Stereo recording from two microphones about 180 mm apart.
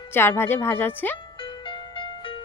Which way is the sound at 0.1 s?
10° left (ahead or behind).